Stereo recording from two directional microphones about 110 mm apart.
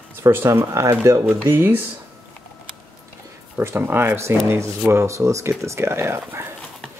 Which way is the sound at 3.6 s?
20° right (ahead or behind).